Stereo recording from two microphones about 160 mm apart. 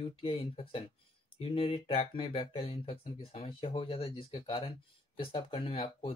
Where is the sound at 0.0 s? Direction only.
35° left (ahead or behind).